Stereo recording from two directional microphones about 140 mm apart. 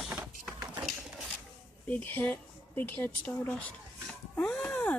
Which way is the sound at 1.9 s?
10° left (ahead or behind).